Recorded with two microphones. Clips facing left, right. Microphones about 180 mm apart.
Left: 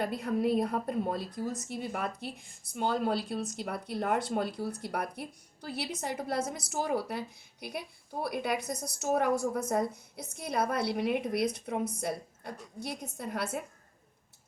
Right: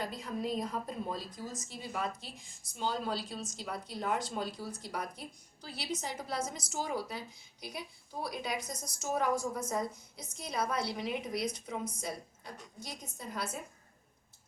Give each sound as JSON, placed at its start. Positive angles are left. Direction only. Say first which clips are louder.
{"t": 0.0, "sound": "a woman's voice", "louder": "left 7 dB", "side_deg": 60}